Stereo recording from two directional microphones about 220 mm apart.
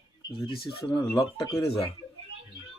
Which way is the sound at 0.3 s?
25° left (ahead or behind).